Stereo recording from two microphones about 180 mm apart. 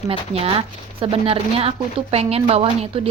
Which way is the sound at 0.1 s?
30° right (ahead or behind).